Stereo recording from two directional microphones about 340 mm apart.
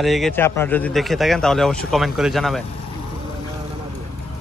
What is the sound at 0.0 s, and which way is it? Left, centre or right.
Speech, centre.